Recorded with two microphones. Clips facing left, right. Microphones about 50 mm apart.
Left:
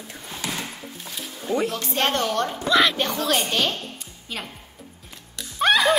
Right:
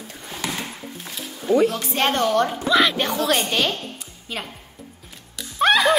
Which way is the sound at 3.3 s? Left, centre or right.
Right.